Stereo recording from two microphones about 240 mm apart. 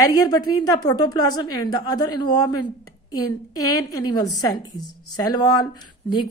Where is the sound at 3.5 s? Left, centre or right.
Centre.